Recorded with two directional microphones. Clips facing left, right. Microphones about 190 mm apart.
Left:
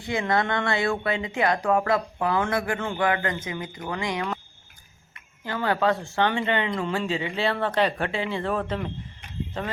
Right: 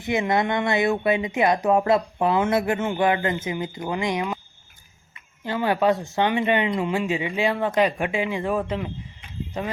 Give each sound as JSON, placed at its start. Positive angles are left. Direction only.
{"t": 0.0, "sound": "speech", "side_deg": -20}
{"t": 5.5, "sound": "speech", "side_deg": -20}